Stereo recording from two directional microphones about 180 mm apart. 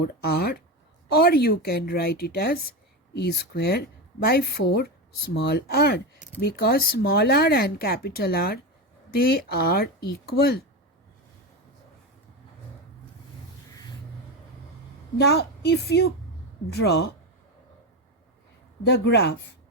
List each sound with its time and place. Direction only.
0.0 s speech: 60° left (ahead or behind)
15.3 s speech: 65° left (ahead or behind)
18.9 s speech: 70° left (ahead or behind)